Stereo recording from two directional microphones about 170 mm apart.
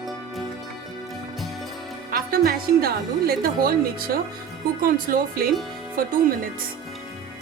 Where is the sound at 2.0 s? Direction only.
60° right (ahead or behind).